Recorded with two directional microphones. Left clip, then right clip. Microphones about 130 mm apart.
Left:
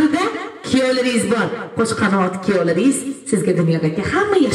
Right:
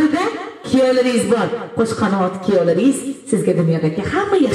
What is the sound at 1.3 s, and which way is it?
Speech, 40° left (ahead or behind).